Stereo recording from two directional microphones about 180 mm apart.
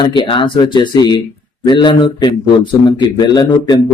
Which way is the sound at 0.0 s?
30° left (ahead or behind).